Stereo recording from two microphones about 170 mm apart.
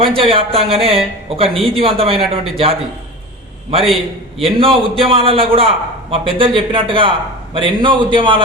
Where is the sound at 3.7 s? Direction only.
35° right (ahead or behind).